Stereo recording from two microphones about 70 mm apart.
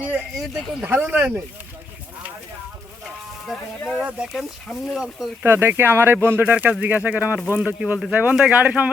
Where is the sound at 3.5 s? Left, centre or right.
Centre.